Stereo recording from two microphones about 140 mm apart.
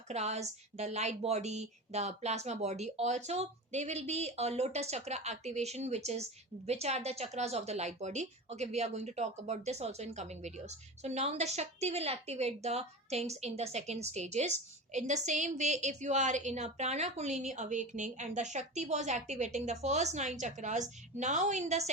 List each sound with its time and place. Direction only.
0.1 s a woman's voice: 50° right (ahead or behind)